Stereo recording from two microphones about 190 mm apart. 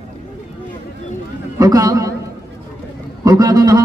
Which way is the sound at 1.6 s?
20° right (ahead or behind).